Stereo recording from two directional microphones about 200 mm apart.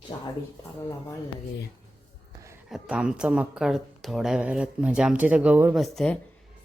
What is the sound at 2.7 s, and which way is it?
A woman's voice, 5° right (ahead or behind).